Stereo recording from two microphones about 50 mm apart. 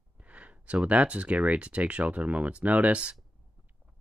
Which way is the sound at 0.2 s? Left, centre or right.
Right.